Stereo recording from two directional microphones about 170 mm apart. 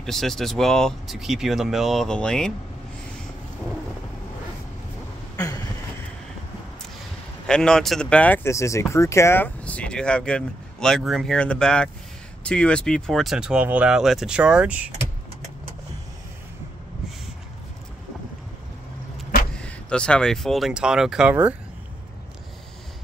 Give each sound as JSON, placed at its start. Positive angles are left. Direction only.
{"t": 0.0, "sound": "speech", "side_deg": 0}
{"t": 5.3, "sound": "a sound", "side_deg": 20}
{"t": 7.4, "sound": "speech", "side_deg": 5}
{"t": 19.5, "sound": "speech", "side_deg": 5}